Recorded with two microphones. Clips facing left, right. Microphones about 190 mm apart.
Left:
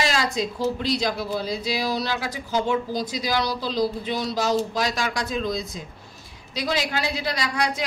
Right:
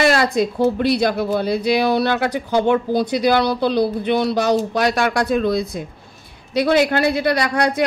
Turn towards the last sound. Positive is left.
turn(degrees=-60)  # may be behind; listen again after turning